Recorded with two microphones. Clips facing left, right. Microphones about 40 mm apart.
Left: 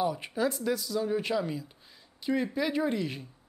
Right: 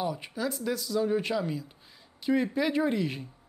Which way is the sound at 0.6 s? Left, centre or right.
Centre.